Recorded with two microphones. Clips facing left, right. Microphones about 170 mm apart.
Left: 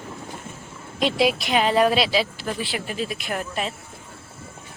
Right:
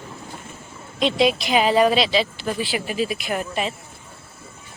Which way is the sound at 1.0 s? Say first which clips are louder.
Right 2 dB; 5° left (ahead or behind).